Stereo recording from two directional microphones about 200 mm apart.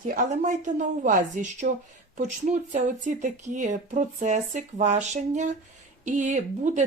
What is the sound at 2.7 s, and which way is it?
Speech, 35° right (ahead or behind).